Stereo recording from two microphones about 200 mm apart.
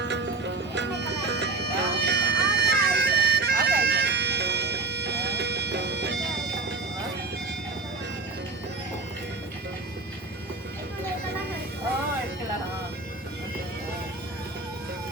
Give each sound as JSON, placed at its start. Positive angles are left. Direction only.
{"t": 0.0, "sound": "music", "side_deg": -60}